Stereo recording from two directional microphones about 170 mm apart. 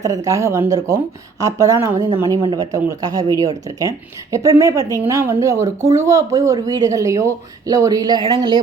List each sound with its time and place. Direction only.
0.0 s speech: 20° right (ahead or behind)